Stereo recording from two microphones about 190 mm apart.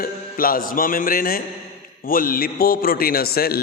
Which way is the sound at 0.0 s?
50° left (ahead or behind).